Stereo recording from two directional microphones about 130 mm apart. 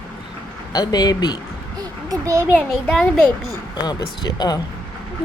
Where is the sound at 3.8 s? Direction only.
35° left (ahead or behind).